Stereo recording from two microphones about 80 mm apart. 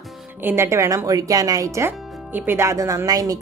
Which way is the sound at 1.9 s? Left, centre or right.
Right.